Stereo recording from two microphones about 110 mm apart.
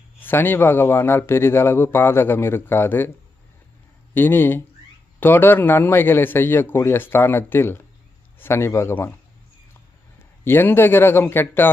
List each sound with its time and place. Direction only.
0.2 s speech: 20° left (ahead or behind)
4.1 s speech: 20° left (ahead or behind)
10.4 s speech: 20° left (ahead or behind)